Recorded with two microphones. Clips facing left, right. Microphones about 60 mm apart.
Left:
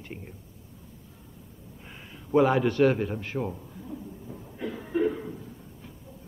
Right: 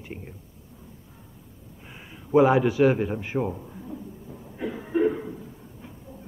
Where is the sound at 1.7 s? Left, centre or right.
Centre.